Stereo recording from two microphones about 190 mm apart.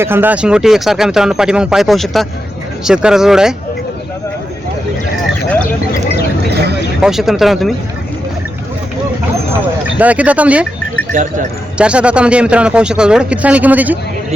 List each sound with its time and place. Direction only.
0.0 s speech: 10° right (ahead or behind)
7.0 s speech: centre (ahead or behind)
10.0 s speech: 5° right (ahead or behind)
11.1 s speech: 45° right (ahead or behind)
11.8 s speech: 5° right (ahead or behind)